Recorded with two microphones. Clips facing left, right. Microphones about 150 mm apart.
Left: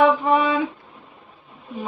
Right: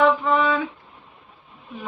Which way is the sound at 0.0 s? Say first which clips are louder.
Left 2 dB; 15° left (ahead or behind).